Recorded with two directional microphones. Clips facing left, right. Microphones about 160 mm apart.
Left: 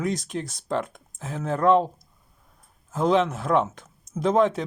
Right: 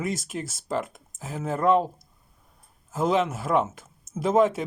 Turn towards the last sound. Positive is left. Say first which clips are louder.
# even
turn(degrees=-5)  # may be behind; listen again after turning